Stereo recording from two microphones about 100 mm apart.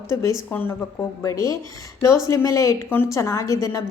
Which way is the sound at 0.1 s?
30° left (ahead or behind).